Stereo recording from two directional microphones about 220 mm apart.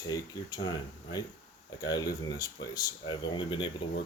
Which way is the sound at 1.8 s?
15° left (ahead or behind).